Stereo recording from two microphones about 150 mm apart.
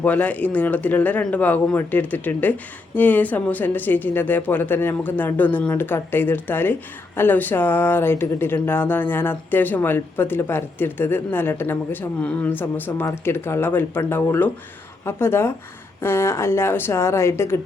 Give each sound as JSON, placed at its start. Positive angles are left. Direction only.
{"t": 0.0, "sound": "speech", "side_deg": 10}